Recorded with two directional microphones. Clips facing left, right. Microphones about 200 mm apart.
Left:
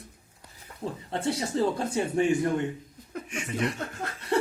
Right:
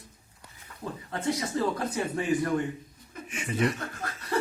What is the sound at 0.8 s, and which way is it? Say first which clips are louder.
Speech: left 1 dB; 30° left (ahead or behind).